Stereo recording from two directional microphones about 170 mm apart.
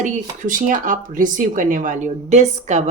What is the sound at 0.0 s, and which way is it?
Speech, 50° right (ahead or behind).